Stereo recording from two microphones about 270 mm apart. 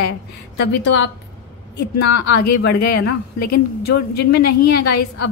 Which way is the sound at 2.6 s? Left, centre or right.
Left.